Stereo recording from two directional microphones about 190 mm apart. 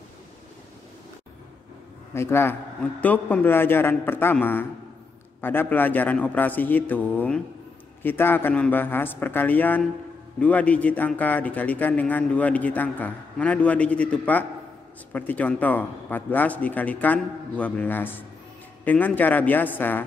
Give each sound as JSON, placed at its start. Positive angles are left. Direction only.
{"t": 2.1, "sound": "a man's voice", "side_deg": 15}